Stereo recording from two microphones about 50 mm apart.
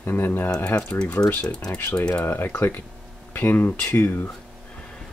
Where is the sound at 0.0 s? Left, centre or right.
Left.